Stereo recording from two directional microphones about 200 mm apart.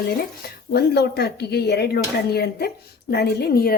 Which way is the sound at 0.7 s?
50° left (ahead or behind).